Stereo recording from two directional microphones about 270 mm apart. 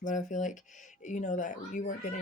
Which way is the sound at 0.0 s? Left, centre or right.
Left.